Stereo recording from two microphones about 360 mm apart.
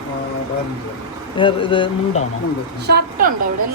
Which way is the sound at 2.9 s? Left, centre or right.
Right.